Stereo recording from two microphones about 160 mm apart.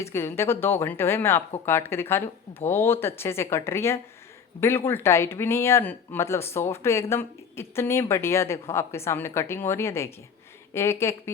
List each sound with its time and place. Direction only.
0.0 s speech: 15° left (ahead or behind)